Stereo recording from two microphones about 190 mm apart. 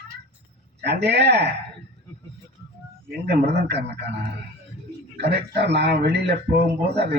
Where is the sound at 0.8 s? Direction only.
60° right (ahead or behind).